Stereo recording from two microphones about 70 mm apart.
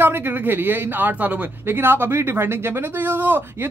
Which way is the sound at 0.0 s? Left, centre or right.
Right.